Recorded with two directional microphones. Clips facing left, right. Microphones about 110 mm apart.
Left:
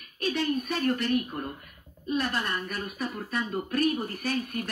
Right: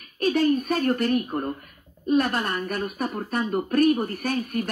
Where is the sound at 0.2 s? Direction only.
45° right (ahead or behind).